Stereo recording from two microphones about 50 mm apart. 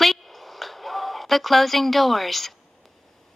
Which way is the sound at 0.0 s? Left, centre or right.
Centre.